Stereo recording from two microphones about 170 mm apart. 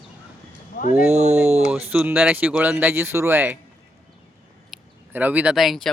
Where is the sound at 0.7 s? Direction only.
55° left (ahead or behind).